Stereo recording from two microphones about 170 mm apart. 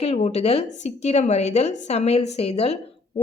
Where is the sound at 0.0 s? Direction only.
35° left (ahead or behind).